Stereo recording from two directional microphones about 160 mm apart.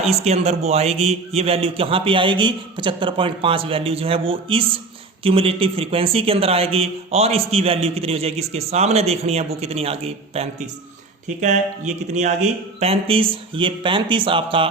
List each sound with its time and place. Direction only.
0.0 s a man's voice: 40° right (ahead or behind)